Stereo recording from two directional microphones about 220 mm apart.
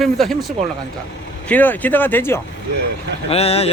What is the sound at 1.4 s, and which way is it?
Speech, 5° left (ahead or behind).